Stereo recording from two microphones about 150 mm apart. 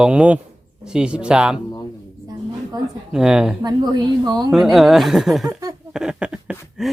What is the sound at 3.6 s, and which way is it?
Speech, 25° right (ahead or behind).